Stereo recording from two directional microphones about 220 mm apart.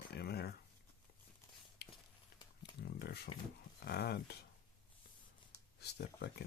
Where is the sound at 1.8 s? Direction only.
50° left (ahead or behind).